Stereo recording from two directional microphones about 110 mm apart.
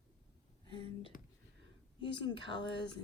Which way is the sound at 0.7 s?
50° left (ahead or behind).